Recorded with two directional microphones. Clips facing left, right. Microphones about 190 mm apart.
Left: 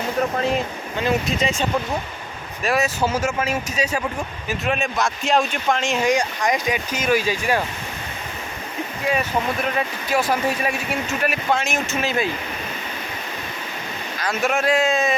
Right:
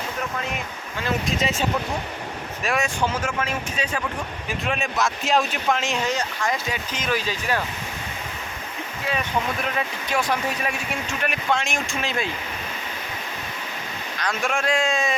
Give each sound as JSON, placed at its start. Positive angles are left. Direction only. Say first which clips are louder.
{"t": 0.2, "sound": "speech", "louder": "left 10 dB", "side_deg": 35}
{"t": 1.3, "sound": "speech", "louder": "left 2 dB", "side_deg": 0}
{"t": 2.6, "sound": "speech", "louder": "left 3 dB", "side_deg": 5}
{"t": 6.0, "sound": "speech", "louder": "left 5 dB", "side_deg": 15}
{"t": 9.0, "sound": "speech", "louder": "left 3 dB", "side_deg": 5}
{"t": 14.2, "sound": "speech", "louder": "left 4 dB", "side_deg": 5}